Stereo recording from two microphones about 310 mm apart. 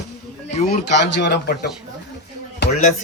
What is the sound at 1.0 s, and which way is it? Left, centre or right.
A man's voice, left.